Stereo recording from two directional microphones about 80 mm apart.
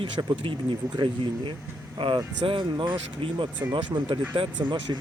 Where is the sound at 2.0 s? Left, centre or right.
Right.